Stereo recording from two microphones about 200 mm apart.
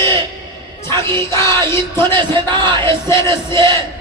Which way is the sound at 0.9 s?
15° left (ahead or behind).